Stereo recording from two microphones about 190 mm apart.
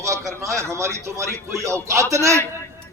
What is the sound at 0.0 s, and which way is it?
A man's voice, 15° right (ahead or behind).